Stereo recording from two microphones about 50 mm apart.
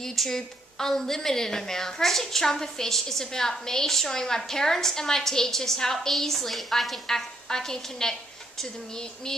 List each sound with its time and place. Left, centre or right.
0.0 s a woman's voice: centre